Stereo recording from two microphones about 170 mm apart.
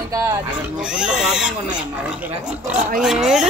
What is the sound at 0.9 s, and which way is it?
Speech, 5° right (ahead or behind).